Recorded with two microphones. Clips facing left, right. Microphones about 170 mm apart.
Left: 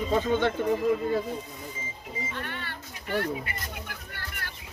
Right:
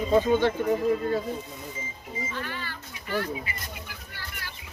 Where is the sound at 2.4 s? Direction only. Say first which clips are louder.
Right 1 dB; 60° left (ahead or behind).